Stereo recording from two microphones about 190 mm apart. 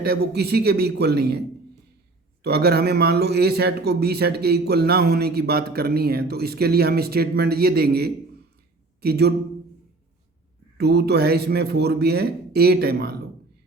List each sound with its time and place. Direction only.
0.0 s a man's voice: 60° right (ahead or behind)
10.8 s a man's voice: 60° right (ahead or behind)